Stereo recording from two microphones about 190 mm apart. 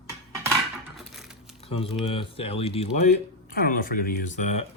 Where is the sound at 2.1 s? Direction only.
30° left (ahead or behind).